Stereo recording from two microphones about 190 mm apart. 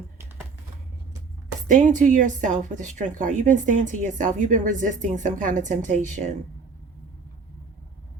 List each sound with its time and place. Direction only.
1.6 s a woman's voice: 40° right (ahead or behind)